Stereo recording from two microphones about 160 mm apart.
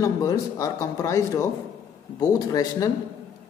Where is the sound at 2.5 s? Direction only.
25° left (ahead or behind).